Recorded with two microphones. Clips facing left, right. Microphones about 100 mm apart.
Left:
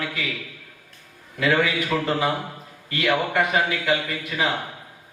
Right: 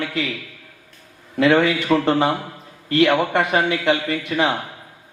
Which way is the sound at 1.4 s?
30° right (ahead or behind).